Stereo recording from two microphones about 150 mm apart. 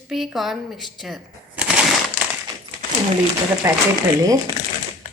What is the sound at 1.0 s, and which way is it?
Shuffling cards, 5° right (ahead or behind).